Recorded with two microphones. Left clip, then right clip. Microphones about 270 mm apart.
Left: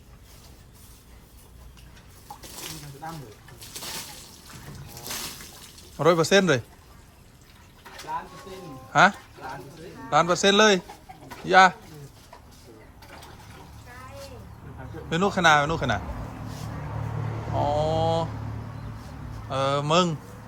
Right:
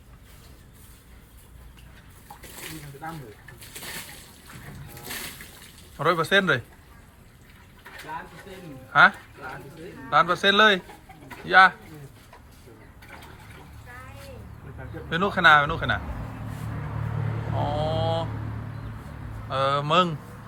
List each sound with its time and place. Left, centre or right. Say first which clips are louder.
6.0 s speech: left 2 dB; centre
8.4 s a sound: left 1 dB; centre
10.1 s speech: even; centre
11.3 s bird: even; centre
15.1 s speech: right 2 dB; centre
17.6 s mantra: left 3 dB; centre
19.5 s speech: right 1 dB; centre